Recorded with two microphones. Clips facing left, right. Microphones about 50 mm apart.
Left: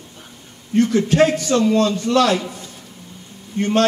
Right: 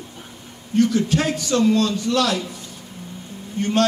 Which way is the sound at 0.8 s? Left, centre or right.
Left.